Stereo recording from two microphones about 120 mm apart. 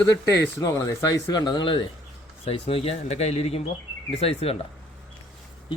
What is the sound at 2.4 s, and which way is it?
Speech, 50° left (ahead or behind).